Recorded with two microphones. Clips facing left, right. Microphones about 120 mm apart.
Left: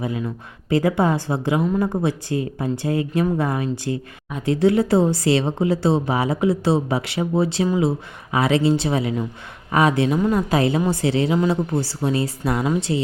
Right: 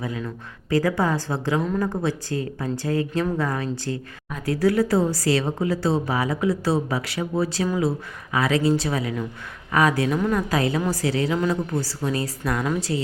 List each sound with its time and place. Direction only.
0.0 s speech: 20° left (ahead or behind)